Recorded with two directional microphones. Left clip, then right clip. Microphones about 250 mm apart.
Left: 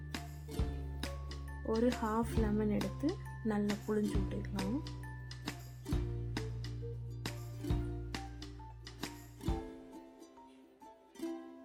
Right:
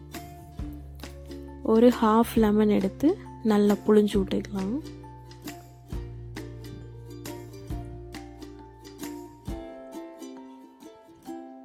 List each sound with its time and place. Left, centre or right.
1.6 s speech: right
4.5 s speech: centre
7.3 s music: centre
9.0 s music: centre